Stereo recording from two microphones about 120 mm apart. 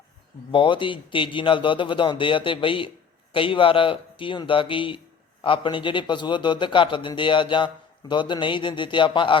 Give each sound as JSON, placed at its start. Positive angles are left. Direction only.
{"t": 0.5, "sound": "a man's voice", "side_deg": 45}